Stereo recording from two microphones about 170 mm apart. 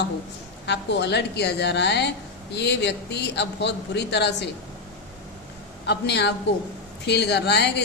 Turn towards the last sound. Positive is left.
turn(degrees=80)